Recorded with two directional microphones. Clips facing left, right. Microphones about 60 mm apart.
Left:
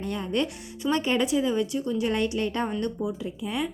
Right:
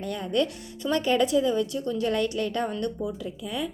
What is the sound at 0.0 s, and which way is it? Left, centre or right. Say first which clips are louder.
A woman's voice: right 1 dB; left.